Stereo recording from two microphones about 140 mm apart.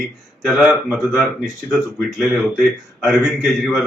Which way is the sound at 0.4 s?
5° right (ahead or behind).